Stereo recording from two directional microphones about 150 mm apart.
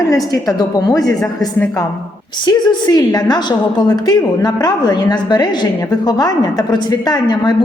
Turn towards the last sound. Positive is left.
turn(degrees=25)  # may be behind; listen again after turning